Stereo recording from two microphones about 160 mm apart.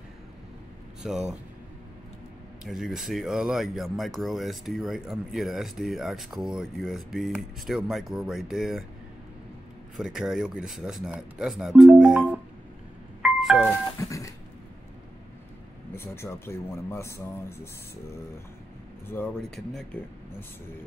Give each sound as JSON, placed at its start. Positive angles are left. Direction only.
{"t": 1.0, "sound": "speech", "side_deg": -5}
{"t": 2.6, "sound": "speech", "side_deg": -5}
{"t": 9.9, "sound": "speech", "side_deg": -5}
{"t": 13.2, "sound": "music", "side_deg": 0}
{"t": 13.9, "sound": "a sound", "side_deg": 20}
{"t": 15.9, "sound": "speech", "side_deg": 15}
{"t": 19.0, "sound": "speech", "side_deg": 10}